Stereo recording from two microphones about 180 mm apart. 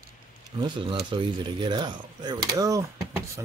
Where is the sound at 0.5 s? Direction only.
25° right (ahead or behind).